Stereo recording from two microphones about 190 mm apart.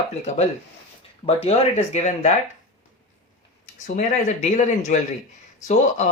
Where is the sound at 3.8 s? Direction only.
40° left (ahead or behind).